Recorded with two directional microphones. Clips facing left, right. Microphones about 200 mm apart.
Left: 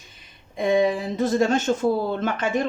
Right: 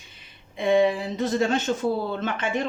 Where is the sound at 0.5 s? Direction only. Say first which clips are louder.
Even; 40° left (ahead or behind).